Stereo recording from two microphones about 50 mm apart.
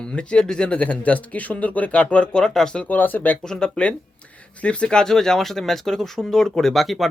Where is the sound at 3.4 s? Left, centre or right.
Centre.